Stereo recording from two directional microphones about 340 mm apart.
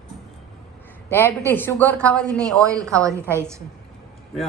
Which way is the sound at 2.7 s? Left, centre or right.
Centre.